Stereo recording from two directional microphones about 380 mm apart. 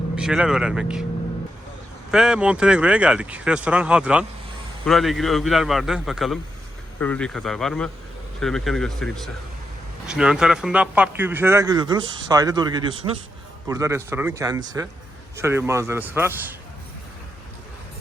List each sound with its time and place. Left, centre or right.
0.2 s speech: centre
2.0 s speech: centre